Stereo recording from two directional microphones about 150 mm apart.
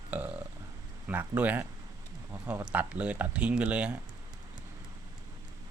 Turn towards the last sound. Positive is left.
turn(degrees=-5)  # may be behind; listen again after turning